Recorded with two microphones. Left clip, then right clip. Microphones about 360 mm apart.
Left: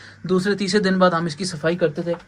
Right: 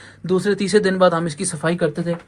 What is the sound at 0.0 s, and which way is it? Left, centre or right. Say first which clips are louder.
A man's voice: right 2 dB; centre.